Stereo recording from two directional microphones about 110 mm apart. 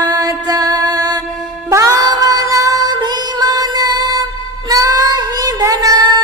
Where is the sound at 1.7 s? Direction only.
30° right (ahead or behind).